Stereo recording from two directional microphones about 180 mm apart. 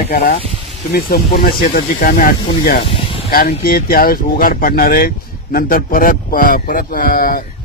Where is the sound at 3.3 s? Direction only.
55° left (ahead or behind).